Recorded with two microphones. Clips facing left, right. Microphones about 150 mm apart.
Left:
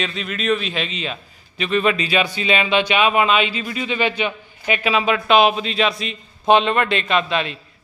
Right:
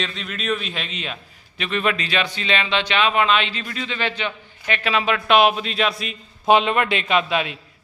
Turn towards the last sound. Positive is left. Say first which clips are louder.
# even
turn(degrees=-10)  # may be behind; listen again after turning